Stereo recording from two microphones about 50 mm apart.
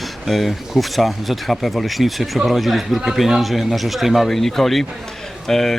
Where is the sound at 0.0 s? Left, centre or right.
Centre.